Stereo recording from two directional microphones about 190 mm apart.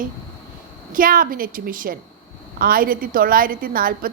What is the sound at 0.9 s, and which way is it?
A woman's voice, 45° right (ahead or behind).